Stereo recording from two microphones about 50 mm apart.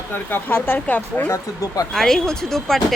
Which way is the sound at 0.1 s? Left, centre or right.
Left.